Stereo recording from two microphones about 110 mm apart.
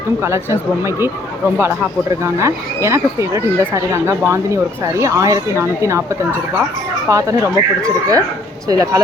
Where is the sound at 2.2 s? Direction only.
25° right (ahead or behind).